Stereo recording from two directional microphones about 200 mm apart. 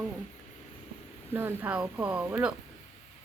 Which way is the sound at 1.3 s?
10° right (ahead or behind).